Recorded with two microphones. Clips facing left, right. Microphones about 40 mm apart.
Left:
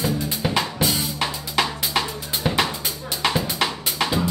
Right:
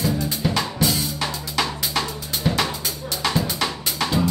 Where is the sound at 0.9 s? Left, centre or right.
Centre.